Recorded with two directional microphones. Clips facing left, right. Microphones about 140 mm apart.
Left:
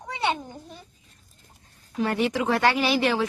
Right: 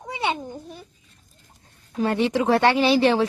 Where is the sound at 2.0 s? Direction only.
25° right (ahead or behind).